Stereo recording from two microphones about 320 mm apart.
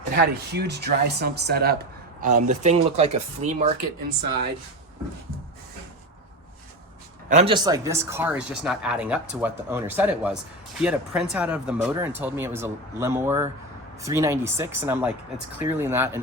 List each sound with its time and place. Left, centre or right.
0.1 s speech: right
7.3 s speech: centre